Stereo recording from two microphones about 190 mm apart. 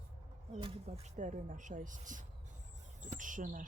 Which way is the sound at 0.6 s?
30° right (ahead or behind).